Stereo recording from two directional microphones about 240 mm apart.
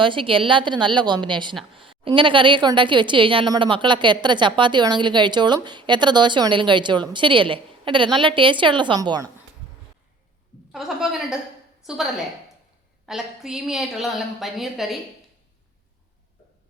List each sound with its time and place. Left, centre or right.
0.0 s a woman's voice: right
10.7 s a woman's voice: centre
13.1 s a woman's voice: centre